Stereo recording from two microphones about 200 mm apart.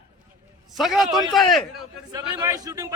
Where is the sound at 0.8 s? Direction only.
Centre (ahead or behind).